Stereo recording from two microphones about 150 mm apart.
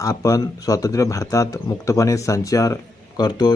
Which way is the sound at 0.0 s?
20° left (ahead or behind).